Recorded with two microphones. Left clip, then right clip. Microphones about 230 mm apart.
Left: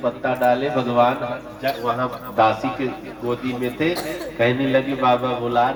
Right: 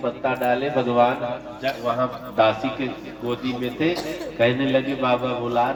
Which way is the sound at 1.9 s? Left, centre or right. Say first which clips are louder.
Left 1 dB; left.